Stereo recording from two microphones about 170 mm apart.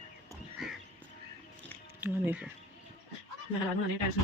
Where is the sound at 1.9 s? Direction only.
10° right (ahead or behind).